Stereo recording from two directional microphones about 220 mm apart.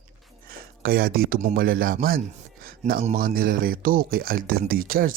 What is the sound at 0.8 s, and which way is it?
Speech, 45° right (ahead or behind).